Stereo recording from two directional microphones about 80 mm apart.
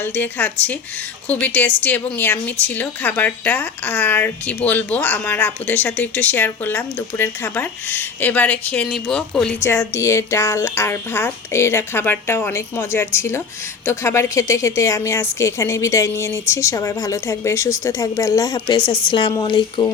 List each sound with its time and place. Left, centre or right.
0.0 s a woman's voice: left
8.9 s speech: centre
9.6 s a woman's voice: left
18.9 s speech: left
19.4 s speech: left